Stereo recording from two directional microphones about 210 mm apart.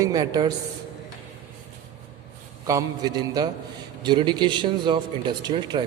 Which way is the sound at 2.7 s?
15° right (ahead or behind).